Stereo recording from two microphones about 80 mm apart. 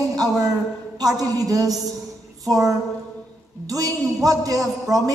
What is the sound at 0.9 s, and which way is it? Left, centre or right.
A man's voice, right.